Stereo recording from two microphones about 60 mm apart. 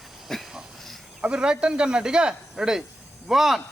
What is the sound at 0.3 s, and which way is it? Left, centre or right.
Dog, centre.